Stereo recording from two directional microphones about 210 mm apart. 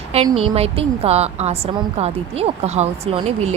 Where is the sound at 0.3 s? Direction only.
30° right (ahead or behind).